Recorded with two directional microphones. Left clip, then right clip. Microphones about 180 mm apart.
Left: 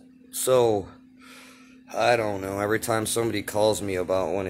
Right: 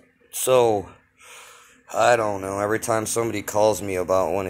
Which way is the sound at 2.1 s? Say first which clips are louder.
Right 3 dB; centre (ahead or behind).